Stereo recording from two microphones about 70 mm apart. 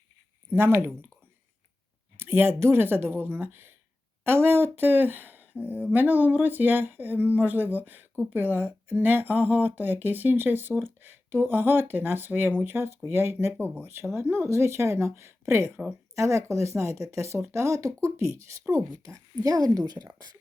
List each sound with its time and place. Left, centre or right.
0.5 s speech: right
2.1 s a woman's voice: right